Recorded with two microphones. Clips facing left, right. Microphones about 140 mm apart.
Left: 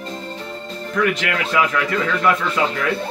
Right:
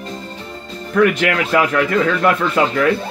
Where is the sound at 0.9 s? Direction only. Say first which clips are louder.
Right 6 dB; 55° right (ahead or behind).